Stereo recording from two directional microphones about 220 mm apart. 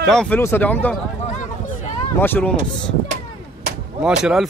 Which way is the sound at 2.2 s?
10° left (ahead or behind).